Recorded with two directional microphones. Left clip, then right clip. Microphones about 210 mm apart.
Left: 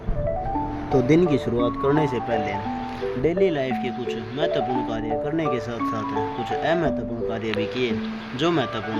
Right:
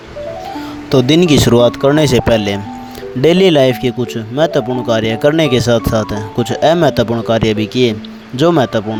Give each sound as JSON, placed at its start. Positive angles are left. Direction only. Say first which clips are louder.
{"t": 0.9, "sound": "speech", "louder": "right 9 dB", "side_deg": -50}
{"t": 3.2, "sound": "speech", "louder": "right 13 dB", "side_deg": -90}
{"t": 5.9, "sound": "speech", "louder": "right 9 dB", "side_deg": -50}
{"t": 6.4, "sound": "speech", "louder": "right 14 dB", "side_deg": -90}
{"t": 8.4, "sound": "speech", "louder": "right 12 dB", "side_deg": -75}